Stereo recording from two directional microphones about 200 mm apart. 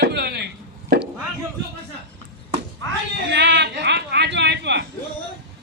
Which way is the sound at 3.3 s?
60° right (ahead or behind).